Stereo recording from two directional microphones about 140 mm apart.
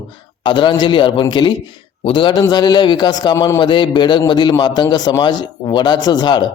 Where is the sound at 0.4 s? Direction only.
35° left (ahead or behind).